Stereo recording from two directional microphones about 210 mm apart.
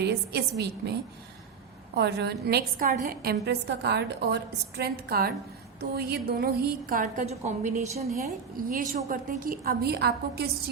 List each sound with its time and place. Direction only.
0.0 s a woman's voice: 50° right (ahead or behind)
2.0 s a woman's voice: 50° right (ahead or behind)